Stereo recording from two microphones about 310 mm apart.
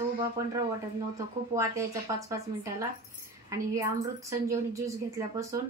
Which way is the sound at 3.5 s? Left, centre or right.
Centre.